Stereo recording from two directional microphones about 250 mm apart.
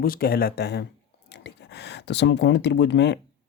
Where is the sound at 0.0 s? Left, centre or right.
Left.